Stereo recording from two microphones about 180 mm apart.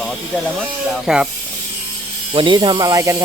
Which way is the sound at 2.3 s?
25° right (ahead or behind).